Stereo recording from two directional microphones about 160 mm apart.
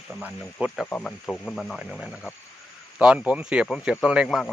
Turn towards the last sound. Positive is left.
turn(degrees=-5)  # may be behind; listen again after turning